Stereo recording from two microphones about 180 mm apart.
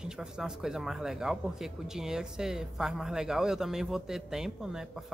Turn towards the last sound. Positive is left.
turn(degrees=-5)  # may be behind; listen again after turning